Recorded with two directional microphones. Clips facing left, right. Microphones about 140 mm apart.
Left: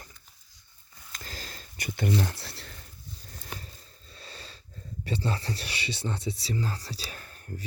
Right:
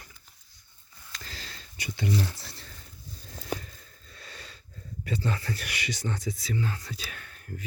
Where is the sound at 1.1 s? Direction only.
40° left (ahead or behind); by 2.7 s 65° left (ahead or behind).